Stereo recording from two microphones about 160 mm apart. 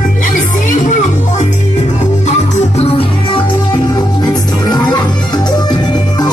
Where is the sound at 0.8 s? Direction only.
50° left (ahead or behind).